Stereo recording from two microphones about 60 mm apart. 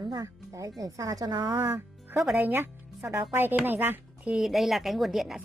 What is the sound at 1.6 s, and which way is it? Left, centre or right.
Music, right.